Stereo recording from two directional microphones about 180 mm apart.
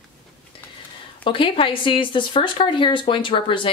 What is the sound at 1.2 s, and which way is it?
Speech, 30° left (ahead or behind).